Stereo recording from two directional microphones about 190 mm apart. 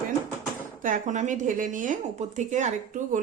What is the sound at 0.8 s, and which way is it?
Speech, 40° right (ahead or behind).